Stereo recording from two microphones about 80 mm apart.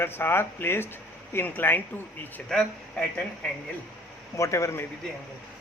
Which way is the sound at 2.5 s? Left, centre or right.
Centre.